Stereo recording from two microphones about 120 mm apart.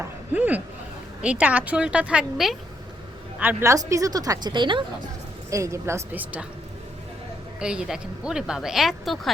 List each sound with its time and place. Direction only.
0.0 s a sound: 15° right (ahead or behind)
1.2 s a woman's voice: 10° right (ahead or behind)
3.4 s a woman's voice: 25° right (ahead or behind); by 4.8 s 40° right (ahead or behind)
5.5 s speech: 25° right (ahead or behind)
7.6 s speech: 5° right (ahead or behind)